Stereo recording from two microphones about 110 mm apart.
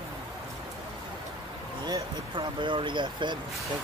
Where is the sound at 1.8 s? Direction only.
40° right (ahead or behind).